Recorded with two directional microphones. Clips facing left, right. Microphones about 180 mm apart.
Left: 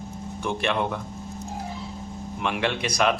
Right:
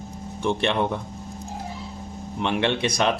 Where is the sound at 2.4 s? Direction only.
30° right (ahead or behind).